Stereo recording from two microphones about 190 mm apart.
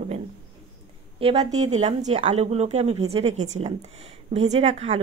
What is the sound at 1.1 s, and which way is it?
Speech, 30° right (ahead or behind).